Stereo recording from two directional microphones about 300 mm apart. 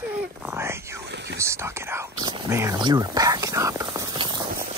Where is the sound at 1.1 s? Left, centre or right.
Right.